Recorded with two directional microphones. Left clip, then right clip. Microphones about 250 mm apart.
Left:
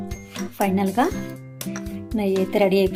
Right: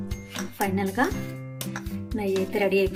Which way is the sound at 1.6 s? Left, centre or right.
Centre.